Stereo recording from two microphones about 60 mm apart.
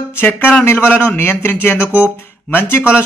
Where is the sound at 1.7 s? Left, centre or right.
Right.